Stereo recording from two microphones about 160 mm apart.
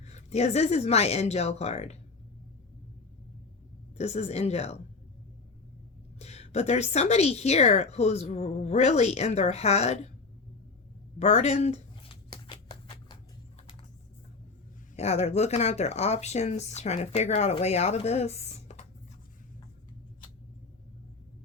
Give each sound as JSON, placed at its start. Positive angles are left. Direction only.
{"t": 0.0, "sound": "a woman's voice", "side_deg": 45}
{"t": 3.9, "sound": "a woman's voice", "side_deg": 45}
{"t": 6.1, "sound": "a woman's voice", "side_deg": 40}
{"t": 11.2, "sound": "a sound", "side_deg": 40}
{"t": 14.9, "sound": "speech", "side_deg": 40}